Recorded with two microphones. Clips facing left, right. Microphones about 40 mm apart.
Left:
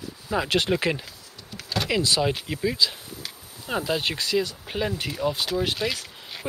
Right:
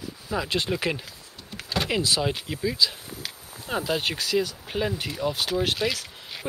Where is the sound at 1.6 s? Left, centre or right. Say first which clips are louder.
Left 1 dB; centre.